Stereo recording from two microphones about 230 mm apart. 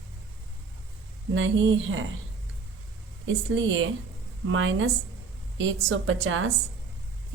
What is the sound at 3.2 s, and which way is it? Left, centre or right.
A woman's voice, right.